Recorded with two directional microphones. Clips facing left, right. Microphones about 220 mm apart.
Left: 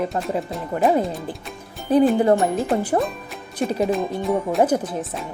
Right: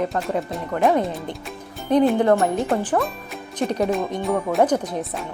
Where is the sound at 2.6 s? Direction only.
Centre (ahead or behind).